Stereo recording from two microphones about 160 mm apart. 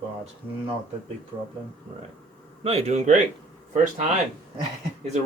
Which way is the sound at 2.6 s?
40° right (ahead or behind).